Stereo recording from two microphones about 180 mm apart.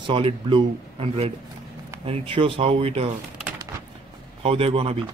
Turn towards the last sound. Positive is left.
turn(degrees=-30)  # may be behind; listen again after turning